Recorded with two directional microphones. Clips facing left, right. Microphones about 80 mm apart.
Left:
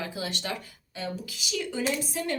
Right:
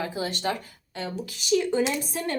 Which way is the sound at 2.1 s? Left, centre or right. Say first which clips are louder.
Right 1 dB; right.